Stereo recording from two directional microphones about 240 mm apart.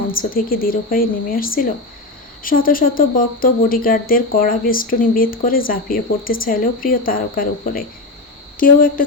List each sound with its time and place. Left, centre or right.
0.1 s speech: left